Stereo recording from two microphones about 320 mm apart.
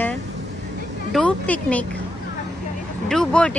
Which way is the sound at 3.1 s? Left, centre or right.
Centre.